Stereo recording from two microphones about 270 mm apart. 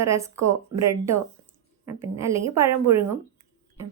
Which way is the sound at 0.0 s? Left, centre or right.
Centre.